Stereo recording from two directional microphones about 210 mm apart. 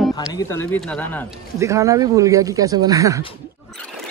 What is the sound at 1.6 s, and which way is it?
Speech, 15° right (ahead or behind).